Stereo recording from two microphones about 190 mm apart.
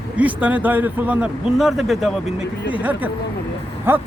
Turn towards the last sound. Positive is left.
turn(degrees=-10)  # may be behind; listen again after turning